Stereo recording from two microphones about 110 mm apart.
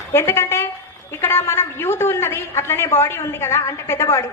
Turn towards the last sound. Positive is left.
turn(degrees=25)  # may be behind; listen again after turning